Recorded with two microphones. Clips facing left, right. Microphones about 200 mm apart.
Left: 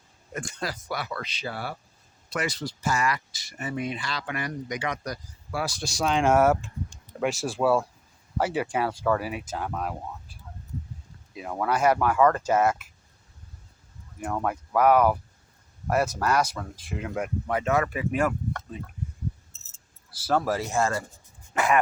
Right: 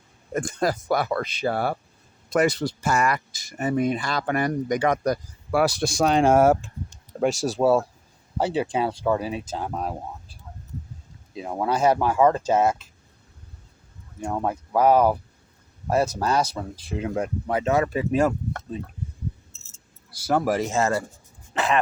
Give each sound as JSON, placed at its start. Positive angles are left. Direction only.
{"t": 0.3, "sound": "speech", "side_deg": -45}
{"t": 3.6, "sound": "speech", "side_deg": -45}
{"t": 11.3, "sound": "speech", "side_deg": -25}
{"t": 14.3, "sound": "speech", "side_deg": -20}
{"t": 20.3, "sound": "speech", "side_deg": -15}